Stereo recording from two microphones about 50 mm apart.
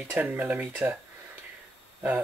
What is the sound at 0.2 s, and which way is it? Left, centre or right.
Speech, right.